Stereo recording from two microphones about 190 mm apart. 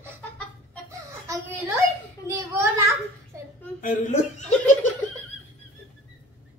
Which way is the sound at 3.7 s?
45° left (ahead or behind).